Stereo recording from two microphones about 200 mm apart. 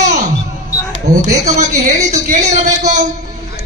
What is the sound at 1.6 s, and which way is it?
Speech, 40° right (ahead or behind).